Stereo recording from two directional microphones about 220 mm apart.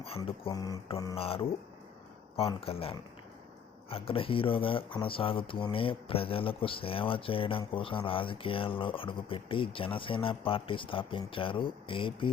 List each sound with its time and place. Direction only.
0.0 s speech: 25° left (ahead or behind)